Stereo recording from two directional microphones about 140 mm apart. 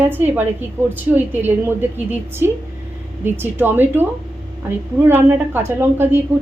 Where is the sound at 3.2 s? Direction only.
15° right (ahead or behind).